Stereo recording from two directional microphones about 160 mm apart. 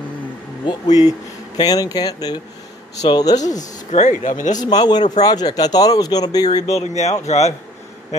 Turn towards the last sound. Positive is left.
turn(degrees=45)  # may be behind; listen again after turning